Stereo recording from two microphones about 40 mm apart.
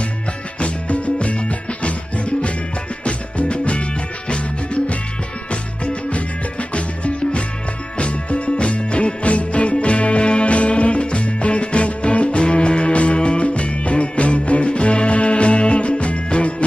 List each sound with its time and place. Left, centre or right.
0.6 s music: left
8.0 s music: left